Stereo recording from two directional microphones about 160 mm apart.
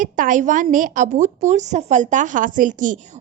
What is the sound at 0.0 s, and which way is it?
Speech, 55° right (ahead or behind).